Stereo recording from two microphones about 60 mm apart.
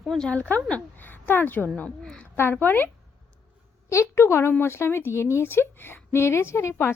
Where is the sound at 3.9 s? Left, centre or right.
Left.